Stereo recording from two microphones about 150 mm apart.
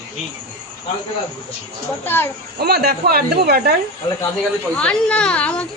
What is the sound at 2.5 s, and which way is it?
Speech, 90° right.